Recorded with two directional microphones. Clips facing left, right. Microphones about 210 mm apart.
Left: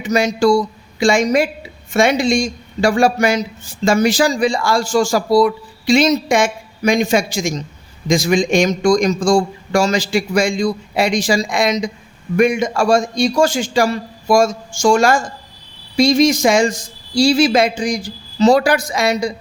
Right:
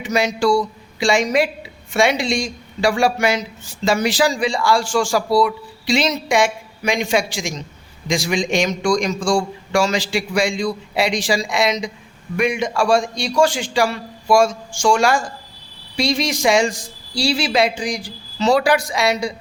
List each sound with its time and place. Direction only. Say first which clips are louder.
0.0 s a man's voice: left 4 dB; 45° left (ahead or behind)